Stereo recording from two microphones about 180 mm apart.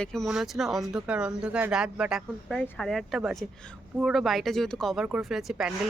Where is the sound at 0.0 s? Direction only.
Centre (ahead or behind).